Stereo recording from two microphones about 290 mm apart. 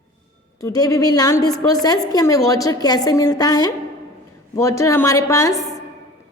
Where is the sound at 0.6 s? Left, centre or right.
Centre.